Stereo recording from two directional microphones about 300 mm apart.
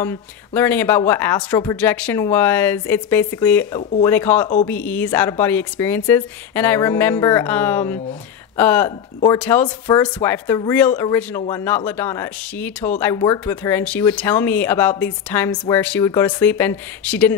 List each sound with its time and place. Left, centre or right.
0.0 s speech: centre